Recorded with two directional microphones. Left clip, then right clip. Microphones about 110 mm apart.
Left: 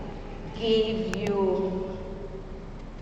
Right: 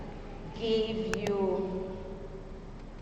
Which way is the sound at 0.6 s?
35° right (ahead or behind).